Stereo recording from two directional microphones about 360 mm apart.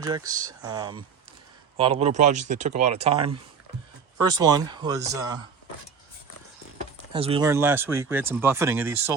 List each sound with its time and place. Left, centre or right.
0.0 s speech: centre
6.7 s speech: centre